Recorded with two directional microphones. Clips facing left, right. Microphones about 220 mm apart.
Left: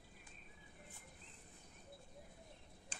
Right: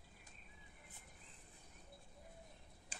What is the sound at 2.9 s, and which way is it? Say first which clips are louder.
Tick-tock: even; 10° right (ahead or behind).